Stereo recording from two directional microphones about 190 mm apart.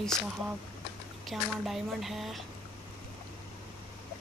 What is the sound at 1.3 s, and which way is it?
Speech, centre (ahead or behind).